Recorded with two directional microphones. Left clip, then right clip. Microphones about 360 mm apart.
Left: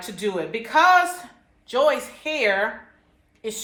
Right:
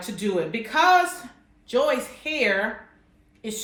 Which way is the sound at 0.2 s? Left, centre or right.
Centre.